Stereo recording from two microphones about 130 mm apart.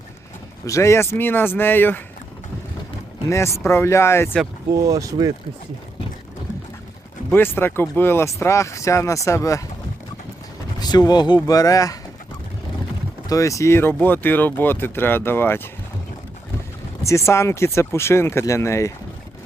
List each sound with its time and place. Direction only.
0.6 s speech: 25° left (ahead or behind)
3.2 s speech: 20° left (ahead or behind)
4.7 s speech: 25° right (ahead or behind)
7.3 s speech: 15° left (ahead or behind)
10.8 s speech: 30° left (ahead or behind)
13.2 s speech: 25° left (ahead or behind)
17.1 s speech: 20° left (ahead or behind)